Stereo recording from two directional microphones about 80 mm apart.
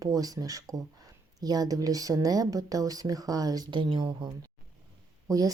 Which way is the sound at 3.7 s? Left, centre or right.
Right.